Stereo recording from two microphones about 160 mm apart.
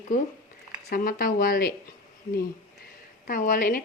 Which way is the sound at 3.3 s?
55° left (ahead or behind).